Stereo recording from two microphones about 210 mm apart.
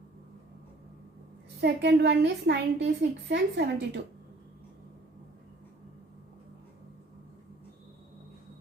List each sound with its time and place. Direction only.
1.6 s a woman's voice: 55° right (ahead or behind)